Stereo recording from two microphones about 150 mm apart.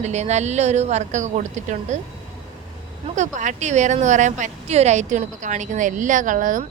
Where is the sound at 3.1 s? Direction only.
55° right (ahead or behind).